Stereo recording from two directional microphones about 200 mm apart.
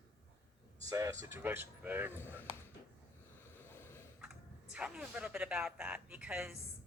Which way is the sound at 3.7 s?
10° left (ahead or behind).